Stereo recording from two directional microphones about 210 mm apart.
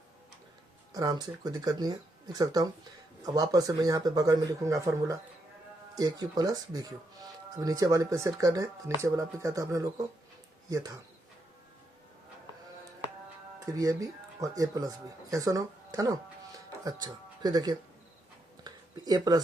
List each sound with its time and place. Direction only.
0.9 s speech: 20° right (ahead or behind)
13.7 s speech: 15° right (ahead or behind)
18.6 s a sound: 20° right (ahead or behind)